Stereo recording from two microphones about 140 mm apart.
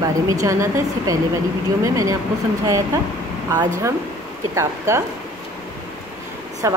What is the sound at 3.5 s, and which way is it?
A woman's voice, 25° right (ahead or behind).